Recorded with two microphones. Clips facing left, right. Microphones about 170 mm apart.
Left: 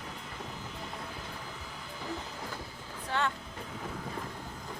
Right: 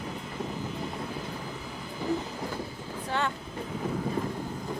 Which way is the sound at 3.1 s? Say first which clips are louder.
Right 2 dB; 10° right (ahead or behind).